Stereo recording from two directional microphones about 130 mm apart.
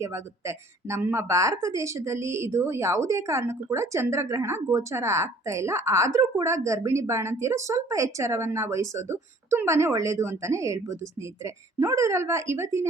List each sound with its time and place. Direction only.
0.0 s a woman's voice: 20° right (ahead or behind)